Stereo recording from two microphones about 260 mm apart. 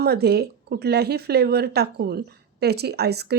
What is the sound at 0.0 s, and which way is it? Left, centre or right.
Speech, right.